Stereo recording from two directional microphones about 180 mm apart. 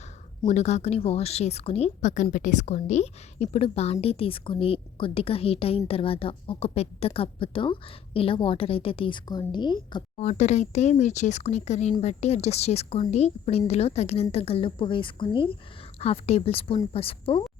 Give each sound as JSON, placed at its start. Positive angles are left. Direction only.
{"t": 0.4, "sound": "a woman's voice", "side_deg": 40}
{"t": 10.2, "sound": "a woman's voice", "side_deg": 40}